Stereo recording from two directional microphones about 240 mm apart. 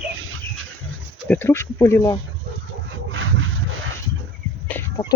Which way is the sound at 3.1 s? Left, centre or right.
Right.